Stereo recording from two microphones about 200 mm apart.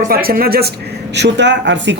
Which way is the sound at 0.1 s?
50° right (ahead or behind).